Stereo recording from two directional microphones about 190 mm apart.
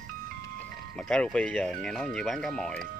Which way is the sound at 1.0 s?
5° left (ahead or behind).